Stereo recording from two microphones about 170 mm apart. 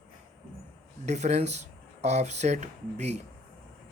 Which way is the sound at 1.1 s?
40° right (ahead or behind).